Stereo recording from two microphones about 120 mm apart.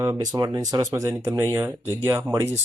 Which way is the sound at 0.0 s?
30° right (ahead or behind).